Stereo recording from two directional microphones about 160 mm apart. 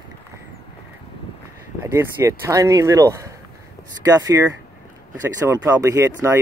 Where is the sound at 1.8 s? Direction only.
15° right (ahead or behind).